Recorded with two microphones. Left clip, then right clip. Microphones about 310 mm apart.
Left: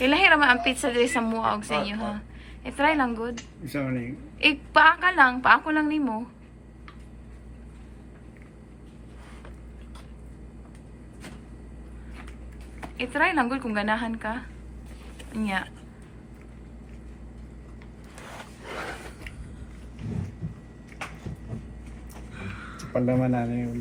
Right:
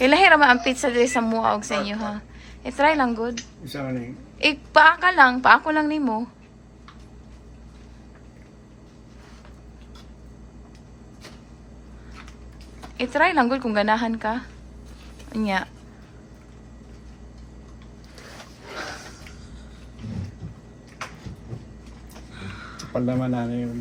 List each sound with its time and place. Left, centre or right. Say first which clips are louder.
0.0 s a woman's voice: right 4 dB; centre
13.0 s a woman's voice: right 4 dB; centre
22.4 s a sound: right 2 dB; centre
22.9 s speech: left 1 dB; right